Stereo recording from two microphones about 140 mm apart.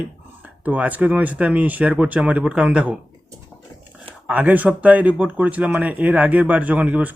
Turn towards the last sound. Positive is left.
turn(degrees=-10)  # may be behind; listen again after turning